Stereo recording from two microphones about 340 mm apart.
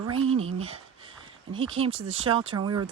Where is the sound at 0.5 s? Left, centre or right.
Centre.